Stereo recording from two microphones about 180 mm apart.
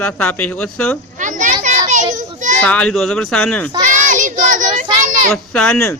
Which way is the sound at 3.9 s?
45° right (ahead or behind).